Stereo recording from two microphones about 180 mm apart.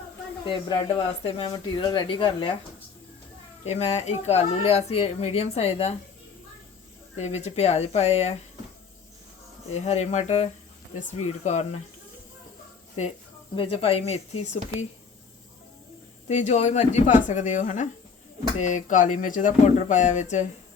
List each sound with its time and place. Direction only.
0.4 s speech: 25° left (ahead or behind)
3.7 s speech: 35° left (ahead or behind)
7.2 s speech: 35° left (ahead or behind)
9.7 s speech: 35° left (ahead or behind)
13.6 s speech: 30° left (ahead or behind)
16.3 s speech: 40° left (ahead or behind)